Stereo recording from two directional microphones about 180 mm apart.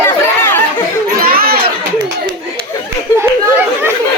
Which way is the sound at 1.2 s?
55° right (ahead or behind).